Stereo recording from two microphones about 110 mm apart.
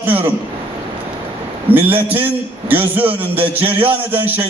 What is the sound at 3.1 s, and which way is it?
Music, 15° right (ahead or behind).